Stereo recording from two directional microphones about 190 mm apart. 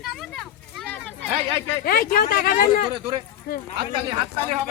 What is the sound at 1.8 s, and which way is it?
Speech, 50° left (ahead or behind).